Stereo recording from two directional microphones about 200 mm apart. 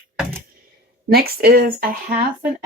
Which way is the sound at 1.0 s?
50° right (ahead or behind).